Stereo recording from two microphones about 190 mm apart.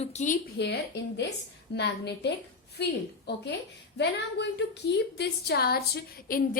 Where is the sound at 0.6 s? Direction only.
60° left (ahead or behind).